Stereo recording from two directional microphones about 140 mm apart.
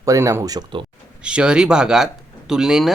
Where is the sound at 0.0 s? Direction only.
25° right (ahead or behind).